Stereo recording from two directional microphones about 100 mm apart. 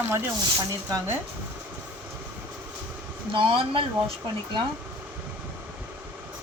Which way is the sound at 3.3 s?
55° right (ahead or behind).